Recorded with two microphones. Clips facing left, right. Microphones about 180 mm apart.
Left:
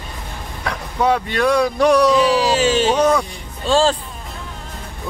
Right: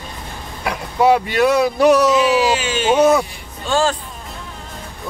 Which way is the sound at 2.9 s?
5° right (ahead or behind).